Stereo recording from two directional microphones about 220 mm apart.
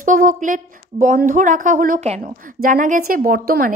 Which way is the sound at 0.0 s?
35° right (ahead or behind).